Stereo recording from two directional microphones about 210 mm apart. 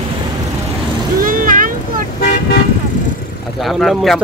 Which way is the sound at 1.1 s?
40° right (ahead or behind).